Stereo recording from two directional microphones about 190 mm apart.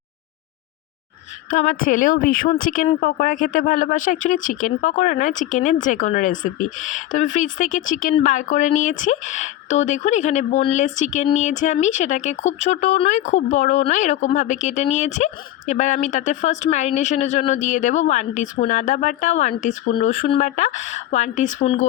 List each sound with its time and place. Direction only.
1.5 s speech: 45° left (ahead or behind)
20.2 s speech: 35° left (ahead or behind)